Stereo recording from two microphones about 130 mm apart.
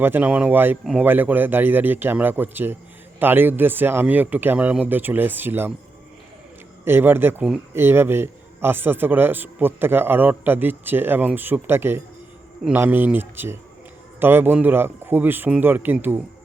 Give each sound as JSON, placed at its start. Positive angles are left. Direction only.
{"t": 0.0, "sound": "a man's voice", "side_deg": -15}
{"t": 6.8, "sound": "a man's voice", "side_deg": -15}